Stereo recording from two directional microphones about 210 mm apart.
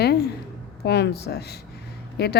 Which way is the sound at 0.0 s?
50° left (ahead or behind).